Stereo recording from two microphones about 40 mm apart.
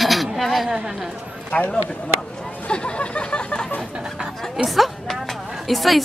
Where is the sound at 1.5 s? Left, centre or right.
Left.